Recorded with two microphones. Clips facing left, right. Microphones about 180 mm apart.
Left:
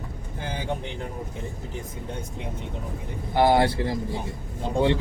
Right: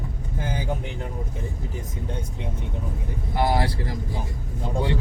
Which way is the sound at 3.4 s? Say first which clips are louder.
Left 4 dB; 25° left (ahead or behind).